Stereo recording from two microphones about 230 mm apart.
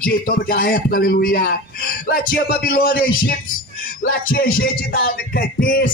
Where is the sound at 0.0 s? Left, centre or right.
Left.